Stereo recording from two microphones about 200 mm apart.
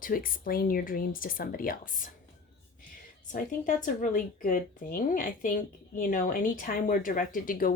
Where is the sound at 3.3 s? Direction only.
40° left (ahead or behind).